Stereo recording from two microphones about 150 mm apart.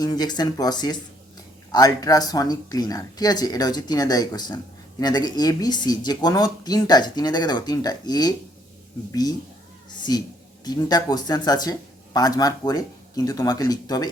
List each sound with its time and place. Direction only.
0.0 s speech: 25° left (ahead or behind)
10.0 s speech: 25° left (ahead or behind)